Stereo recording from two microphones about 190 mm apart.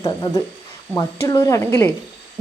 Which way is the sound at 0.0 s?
15° left (ahead or behind).